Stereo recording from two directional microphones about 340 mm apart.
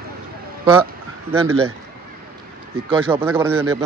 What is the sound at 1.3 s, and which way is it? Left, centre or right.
Speech, right.